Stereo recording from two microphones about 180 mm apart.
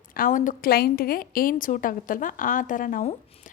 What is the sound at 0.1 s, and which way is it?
Speech, 50° left (ahead or behind).